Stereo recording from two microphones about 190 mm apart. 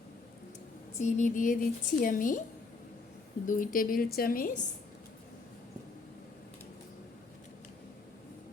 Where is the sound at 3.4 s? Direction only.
45° left (ahead or behind).